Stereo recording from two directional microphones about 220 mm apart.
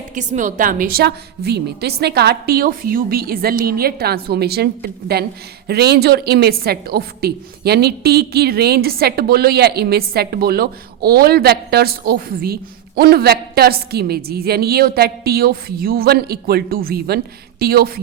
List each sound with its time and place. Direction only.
0.1 s a woman's voice: 35° right (ahead or behind)